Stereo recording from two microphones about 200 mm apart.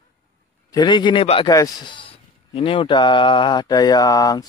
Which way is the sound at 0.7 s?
20° left (ahead or behind).